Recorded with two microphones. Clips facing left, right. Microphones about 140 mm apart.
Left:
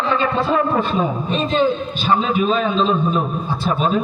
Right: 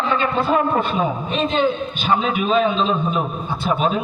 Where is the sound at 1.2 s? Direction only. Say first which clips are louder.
Left 2 dB; 40° left (ahead or behind).